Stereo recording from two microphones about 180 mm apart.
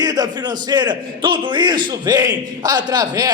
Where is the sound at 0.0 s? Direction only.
20° right (ahead or behind).